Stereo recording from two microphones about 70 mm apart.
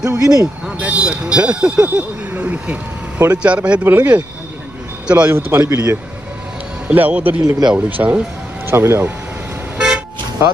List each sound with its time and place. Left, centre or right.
0.0 s speech: right
0.7 s a man's voice: centre
5.3 s a man's voice: right
6.9 s speech: right
8.6 s speech: right